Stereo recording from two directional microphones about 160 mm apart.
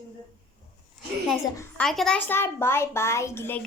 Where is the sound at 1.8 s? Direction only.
Centre (ahead or behind).